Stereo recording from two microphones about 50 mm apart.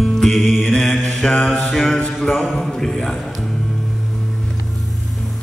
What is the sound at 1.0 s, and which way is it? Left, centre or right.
Mantra, centre.